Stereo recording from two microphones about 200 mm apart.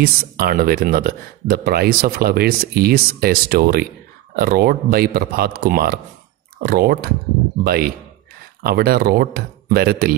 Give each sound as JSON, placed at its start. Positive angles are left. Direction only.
{"t": 0.0, "sound": "speech", "side_deg": -50}